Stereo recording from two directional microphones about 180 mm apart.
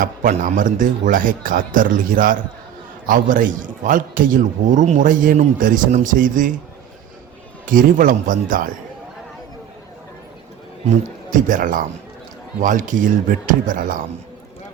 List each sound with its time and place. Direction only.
0.0 s a man's voice: 45° right (ahead or behind)
7.7 s a man's voice: 50° right (ahead or behind)
11.3 s a man's voice: 45° right (ahead or behind)